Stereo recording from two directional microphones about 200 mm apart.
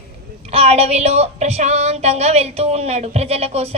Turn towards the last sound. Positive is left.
turn(degrees=-30)  # may be behind; listen again after turning